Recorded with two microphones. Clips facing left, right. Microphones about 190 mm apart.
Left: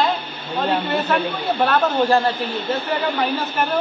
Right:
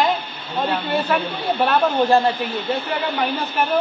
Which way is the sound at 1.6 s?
15° right (ahead or behind).